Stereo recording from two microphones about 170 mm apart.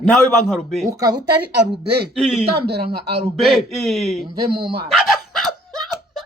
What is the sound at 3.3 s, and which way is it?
Speech, centre (ahead or behind).